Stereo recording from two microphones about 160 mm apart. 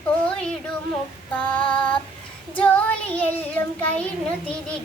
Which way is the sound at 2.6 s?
10° left (ahead or behind).